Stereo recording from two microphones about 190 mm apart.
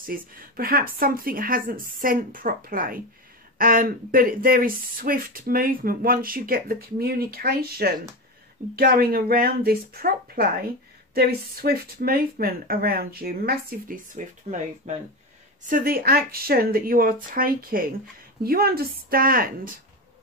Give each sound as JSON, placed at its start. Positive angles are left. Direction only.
{"t": 0.0, "sound": "speech", "side_deg": -50}